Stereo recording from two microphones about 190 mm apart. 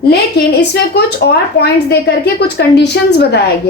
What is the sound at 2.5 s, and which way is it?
Speech, 65° left (ahead or behind).